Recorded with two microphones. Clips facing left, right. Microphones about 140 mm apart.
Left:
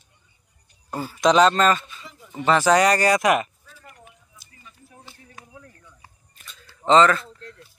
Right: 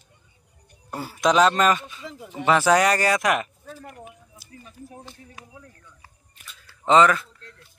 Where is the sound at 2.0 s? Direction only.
90° right.